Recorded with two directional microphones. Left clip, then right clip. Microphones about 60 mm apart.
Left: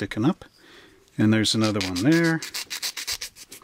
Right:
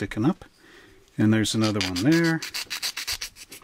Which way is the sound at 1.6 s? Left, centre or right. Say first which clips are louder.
Left 1 dB; centre.